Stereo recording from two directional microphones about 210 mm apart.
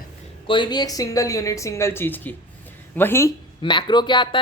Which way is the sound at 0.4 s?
20° left (ahead or behind).